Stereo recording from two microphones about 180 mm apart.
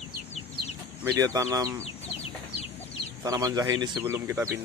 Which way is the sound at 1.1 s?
20° right (ahead or behind).